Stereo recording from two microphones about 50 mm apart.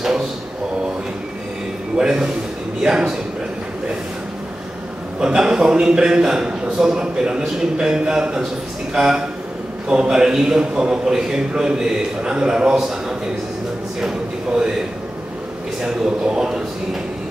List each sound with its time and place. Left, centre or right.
2.0 s a man's voice: centre
5.2 s a man's voice: centre
14.0 s a man's voice: centre
15.8 s a man's voice: centre